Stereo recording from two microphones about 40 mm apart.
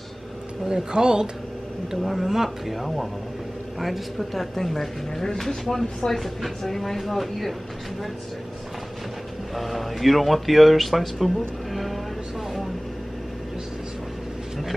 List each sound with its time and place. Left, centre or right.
0.7 s speech: centre
1.9 s speech: centre
9.6 s speech: centre